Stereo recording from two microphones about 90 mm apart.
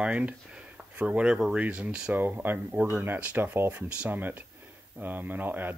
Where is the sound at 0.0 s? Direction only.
15° right (ahead or behind).